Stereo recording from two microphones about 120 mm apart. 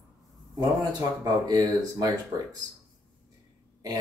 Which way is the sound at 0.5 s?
30° right (ahead or behind).